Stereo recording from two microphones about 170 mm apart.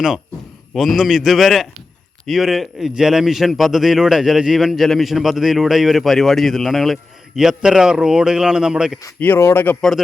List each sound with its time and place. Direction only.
0.7 s a man's voice: centre (ahead or behind)
9.0 s speech: 10° left (ahead or behind)